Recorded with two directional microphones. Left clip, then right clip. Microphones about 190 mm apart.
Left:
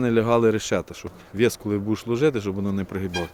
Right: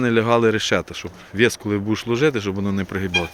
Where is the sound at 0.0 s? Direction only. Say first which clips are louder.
Right 2 dB; centre (ahead or behind).